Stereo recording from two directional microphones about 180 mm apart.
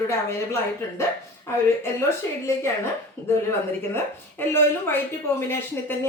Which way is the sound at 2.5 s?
15° left (ahead or behind).